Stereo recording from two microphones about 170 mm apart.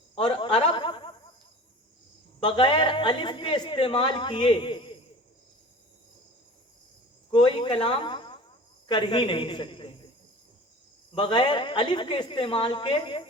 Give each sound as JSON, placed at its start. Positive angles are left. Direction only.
{"t": 0.2, "sound": "a sound", "side_deg": 30}
{"t": 2.4, "sound": "a woman's voice", "side_deg": 30}
{"t": 7.3, "sound": "cricket", "side_deg": 30}
{"t": 8.9, "sound": "a man's voice", "side_deg": 30}
{"t": 11.1, "sound": "a woman's voice", "side_deg": 30}